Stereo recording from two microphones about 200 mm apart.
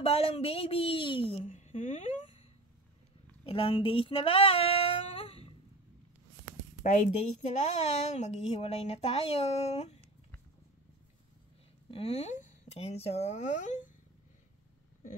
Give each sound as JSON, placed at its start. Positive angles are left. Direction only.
{"t": 0.0, "sound": "a woman's voice", "side_deg": 30}
{"t": 1.4, "sound": "speech", "side_deg": 35}
{"t": 3.4, "sound": "female singing", "side_deg": 30}
{"t": 6.8, "sound": "a woman's voice", "side_deg": 35}
{"t": 11.9, "sound": "a woman's voice", "side_deg": 30}